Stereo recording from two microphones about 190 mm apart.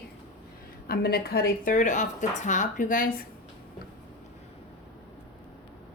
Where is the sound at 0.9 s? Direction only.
55° left (ahead or behind).